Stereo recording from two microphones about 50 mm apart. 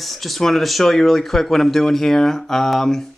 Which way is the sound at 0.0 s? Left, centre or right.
Centre.